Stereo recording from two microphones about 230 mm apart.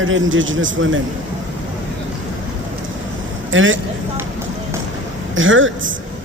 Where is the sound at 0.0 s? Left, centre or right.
Right.